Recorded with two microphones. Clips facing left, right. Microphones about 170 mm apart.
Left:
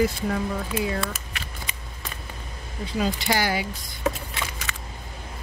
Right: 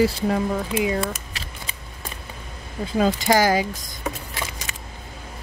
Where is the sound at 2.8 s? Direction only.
45° right (ahead or behind).